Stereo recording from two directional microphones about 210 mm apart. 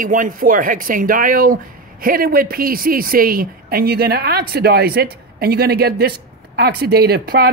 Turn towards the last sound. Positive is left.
turn(degrees=-50)  # may be behind; listen again after turning